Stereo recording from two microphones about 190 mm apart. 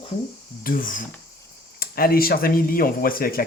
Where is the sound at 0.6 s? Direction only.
45° left (ahead or behind).